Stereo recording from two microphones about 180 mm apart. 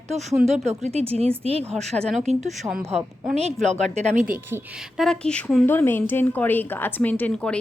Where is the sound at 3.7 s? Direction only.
40° right (ahead or behind).